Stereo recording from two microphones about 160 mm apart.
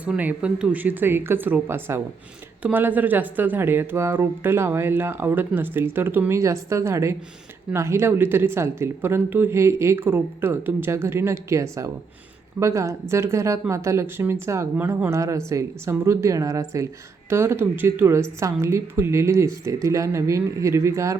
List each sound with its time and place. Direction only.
0.0 s speech: 10° right (ahead or behind)